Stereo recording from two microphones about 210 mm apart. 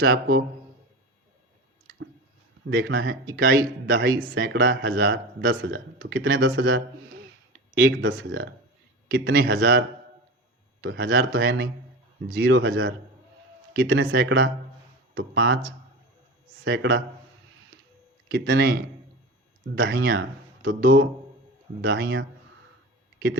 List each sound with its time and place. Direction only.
0.0 s speech: 50° right (ahead or behind)
2.6 s speech: 60° right (ahead or behind)
6.1 s speech: 50° right (ahead or behind)
7.9 s speech: 55° right (ahead or behind)
11.3 s speech: 50° right (ahead or behind)
16.6 s speech: 55° right (ahead or behind)
18.3 s speech: 55° right (ahead or behind)
19.8 s speech: 50° right (ahead or behind)